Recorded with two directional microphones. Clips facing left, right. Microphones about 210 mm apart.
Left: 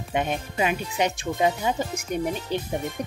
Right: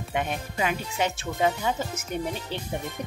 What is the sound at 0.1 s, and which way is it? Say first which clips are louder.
Speech: left 3 dB; 20° left (ahead or behind).